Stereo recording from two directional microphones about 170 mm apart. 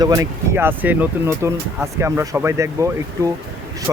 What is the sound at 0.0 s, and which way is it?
Speech, 20° right (ahead or behind).